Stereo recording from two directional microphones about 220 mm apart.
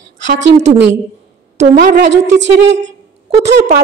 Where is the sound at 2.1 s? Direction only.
55° right (ahead or behind).